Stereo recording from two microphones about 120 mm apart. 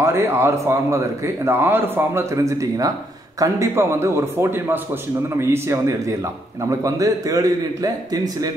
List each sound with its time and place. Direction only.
0.0 s a man's voice: 20° right (ahead or behind)